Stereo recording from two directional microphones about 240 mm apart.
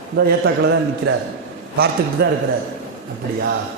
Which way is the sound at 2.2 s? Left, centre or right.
Right.